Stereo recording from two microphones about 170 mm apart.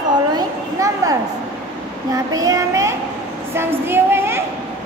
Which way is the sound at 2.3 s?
20° right (ahead or behind).